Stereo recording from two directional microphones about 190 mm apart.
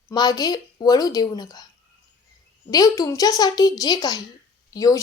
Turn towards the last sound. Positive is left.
turn(degrees=20)  # may be behind; listen again after turning